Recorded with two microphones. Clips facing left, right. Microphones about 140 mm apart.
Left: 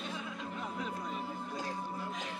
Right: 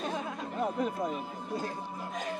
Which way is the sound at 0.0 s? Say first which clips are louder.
Right 6 dB; 45° right (ahead or behind).